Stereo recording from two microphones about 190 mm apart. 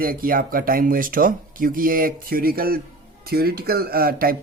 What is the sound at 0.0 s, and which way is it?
Speech, 50° right (ahead or behind).